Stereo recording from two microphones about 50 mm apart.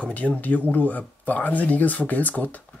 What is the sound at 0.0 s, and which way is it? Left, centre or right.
Speech, left.